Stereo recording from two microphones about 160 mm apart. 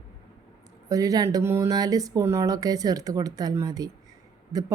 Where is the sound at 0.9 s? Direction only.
20° right (ahead or behind).